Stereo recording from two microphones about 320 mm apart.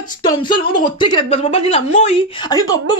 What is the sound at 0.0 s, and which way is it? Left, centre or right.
A woman's voice, centre.